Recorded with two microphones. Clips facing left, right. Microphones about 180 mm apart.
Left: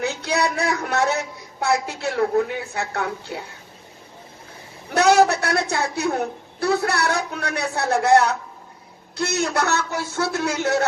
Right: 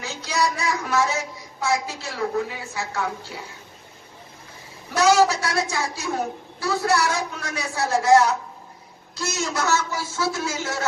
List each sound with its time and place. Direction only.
0.0 s a woman's voice: 60° left (ahead or behind)
4.9 s a woman's voice: 60° left (ahead or behind)